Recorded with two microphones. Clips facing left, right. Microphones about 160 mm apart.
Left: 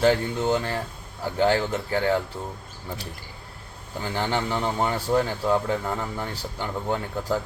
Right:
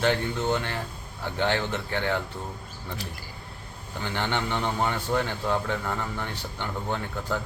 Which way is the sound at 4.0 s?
35° left (ahead or behind).